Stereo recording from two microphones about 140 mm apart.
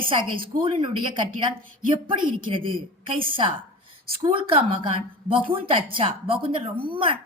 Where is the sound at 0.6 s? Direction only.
35° right (ahead or behind).